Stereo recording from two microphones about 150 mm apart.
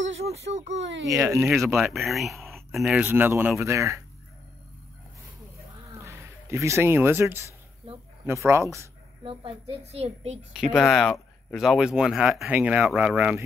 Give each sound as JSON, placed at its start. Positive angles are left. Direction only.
{"t": 0.6, "sound": "speech", "side_deg": -50}
{"t": 1.0, "sound": "speech", "side_deg": -20}
{"t": 1.4, "sound": "speech", "side_deg": -5}
{"t": 5.9, "sound": "speech", "side_deg": -20}
{"t": 9.2, "sound": "a woman's voice", "side_deg": -35}
{"t": 10.5, "sound": "speech", "side_deg": -5}